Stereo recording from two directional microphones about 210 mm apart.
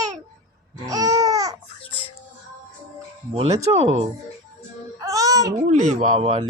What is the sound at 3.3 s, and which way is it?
Speech, 30° right (ahead or behind).